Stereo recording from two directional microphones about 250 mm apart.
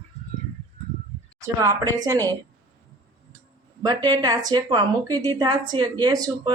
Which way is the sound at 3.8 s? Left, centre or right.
Centre.